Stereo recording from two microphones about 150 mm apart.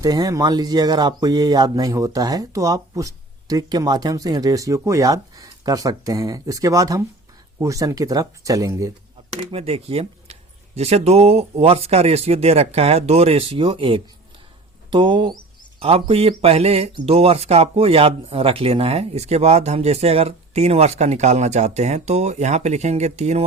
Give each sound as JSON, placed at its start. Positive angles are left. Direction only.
{"t": 0.0, "sound": "speech", "side_deg": -25}
{"t": 9.5, "sound": "a man's voice", "side_deg": -40}